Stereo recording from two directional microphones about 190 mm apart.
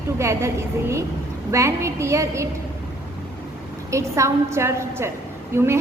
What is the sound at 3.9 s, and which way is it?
A woman's voice, 15° right (ahead or behind).